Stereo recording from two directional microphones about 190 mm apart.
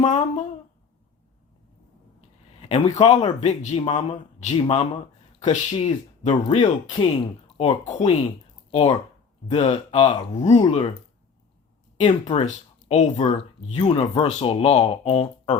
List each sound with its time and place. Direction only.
0.0 s speech: 40° left (ahead or behind)
2.6 s a sound: 30° left (ahead or behind)
3.0 s speech: 30° left (ahead or behind)
9.5 s speech: 35° left (ahead or behind)
12.0 s speech: 30° left (ahead or behind)